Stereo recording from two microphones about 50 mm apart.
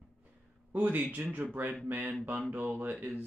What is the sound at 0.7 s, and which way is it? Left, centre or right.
Speech, right.